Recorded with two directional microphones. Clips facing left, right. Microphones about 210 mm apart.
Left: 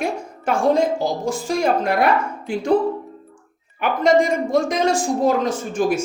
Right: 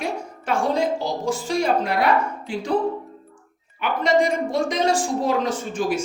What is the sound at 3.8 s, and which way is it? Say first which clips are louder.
Speech: left 3 dB; 45° left (ahead or behind).